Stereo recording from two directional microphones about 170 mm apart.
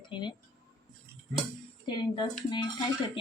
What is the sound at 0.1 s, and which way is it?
Speech, 25° left (ahead or behind).